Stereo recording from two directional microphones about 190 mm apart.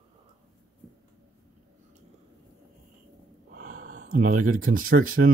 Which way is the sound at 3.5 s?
45° right (ahead or behind).